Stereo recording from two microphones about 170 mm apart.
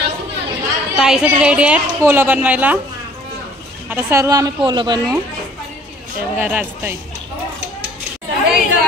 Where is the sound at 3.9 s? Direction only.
15° right (ahead or behind).